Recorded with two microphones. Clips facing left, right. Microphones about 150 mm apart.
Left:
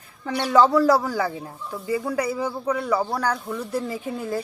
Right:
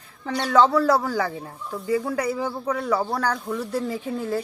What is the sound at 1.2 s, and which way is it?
Speech, 15° left (ahead or behind).